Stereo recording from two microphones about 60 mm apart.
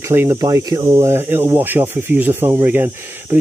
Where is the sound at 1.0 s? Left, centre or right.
Right.